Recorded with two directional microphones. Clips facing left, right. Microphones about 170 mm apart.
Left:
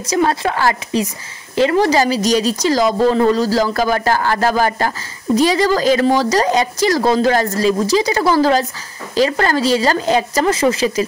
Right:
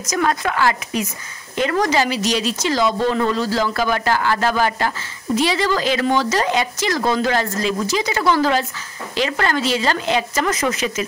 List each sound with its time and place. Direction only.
0.0 s speech: 30° left (ahead or behind)